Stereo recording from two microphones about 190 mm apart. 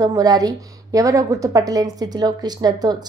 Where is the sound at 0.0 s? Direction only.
20° right (ahead or behind).